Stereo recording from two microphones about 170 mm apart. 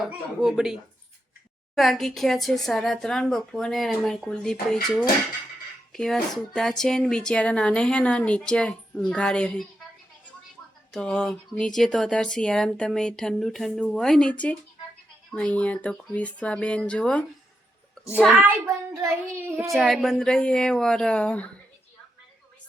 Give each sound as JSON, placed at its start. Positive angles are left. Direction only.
{"t": 0.0, "sound": "speech", "side_deg": -5}
{"t": 5.9, "sound": "speech", "side_deg": 0}
{"t": 10.9, "sound": "speech", "side_deg": 5}
{"t": 18.3, "sound": "speech", "side_deg": -5}
{"t": 19.7, "sound": "speech", "side_deg": 0}